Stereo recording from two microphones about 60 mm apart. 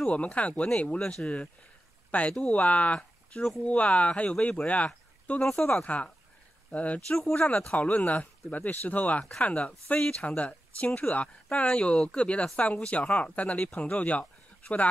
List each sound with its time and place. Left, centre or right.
0.0 s speech: left
2.0 s a sound: left
2.5 s speech: left
5.4 s speech: centre
5.9 s speech: left
7.2 s speech: centre
7.7 s speech: left